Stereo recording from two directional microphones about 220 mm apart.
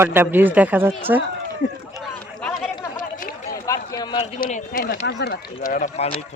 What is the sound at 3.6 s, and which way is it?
Run, 15° left (ahead or behind).